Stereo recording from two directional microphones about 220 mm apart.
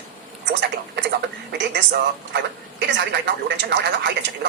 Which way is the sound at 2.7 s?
50° right (ahead or behind).